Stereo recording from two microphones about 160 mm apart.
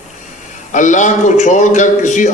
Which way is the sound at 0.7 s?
50° left (ahead or behind).